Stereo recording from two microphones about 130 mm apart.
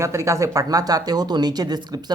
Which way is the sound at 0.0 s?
20° right (ahead or behind).